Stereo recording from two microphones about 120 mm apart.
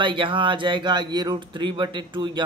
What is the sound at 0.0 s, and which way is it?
A man's voice, 45° right (ahead or behind).